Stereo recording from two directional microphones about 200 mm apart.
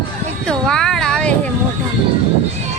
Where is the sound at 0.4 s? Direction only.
5° left (ahead or behind).